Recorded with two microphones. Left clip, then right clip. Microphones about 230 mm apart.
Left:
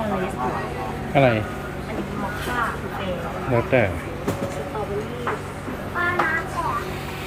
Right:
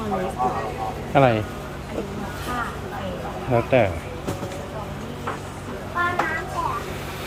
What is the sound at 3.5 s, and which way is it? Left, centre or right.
Speech, centre.